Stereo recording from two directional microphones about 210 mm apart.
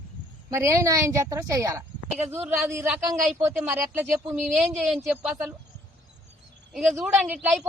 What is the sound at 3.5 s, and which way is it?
Speech, centre (ahead or behind).